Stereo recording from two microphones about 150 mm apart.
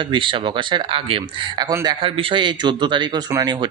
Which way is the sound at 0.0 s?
35° right (ahead or behind).